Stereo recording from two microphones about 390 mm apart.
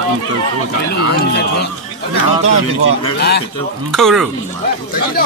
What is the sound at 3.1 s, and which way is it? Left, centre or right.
Speech, left.